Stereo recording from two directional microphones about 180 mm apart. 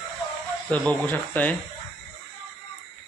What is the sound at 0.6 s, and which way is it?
Speech, 10° left (ahead or behind).